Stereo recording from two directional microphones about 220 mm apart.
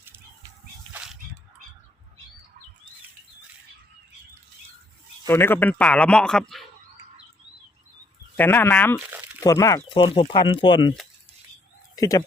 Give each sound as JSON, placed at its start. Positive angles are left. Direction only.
{"t": 0.9, "sound": "a sound", "side_deg": -5}
{"t": 5.3, "sound": "a man's voice", "side_deg": 10}
{"t": 8.4, "sound": "speech", "side_deg": 10}
{"t": 9.0, "sound": "crumpling", "side_deg": -10}
{"t": 9.4, "sound": "speech", "side_deg": 15}
{"t": 11.9, "sound": "speech", "side_deg": 15}